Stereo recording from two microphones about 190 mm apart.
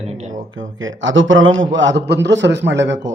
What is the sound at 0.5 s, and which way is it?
Speech, 90° right.